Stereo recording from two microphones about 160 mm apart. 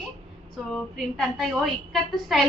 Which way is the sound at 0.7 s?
Centre (ahead or behind).